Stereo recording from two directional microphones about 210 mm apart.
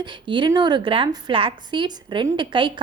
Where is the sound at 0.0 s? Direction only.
20° right (ahead or behind).